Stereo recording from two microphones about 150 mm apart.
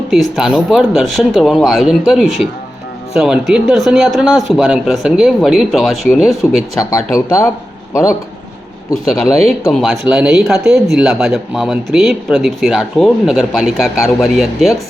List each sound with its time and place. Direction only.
0.1 s speech: centre (ahead or behind)
7.3 s a man's voice: 20° left (ahead or behind)
9.1 s speech: centre (ahead or behind)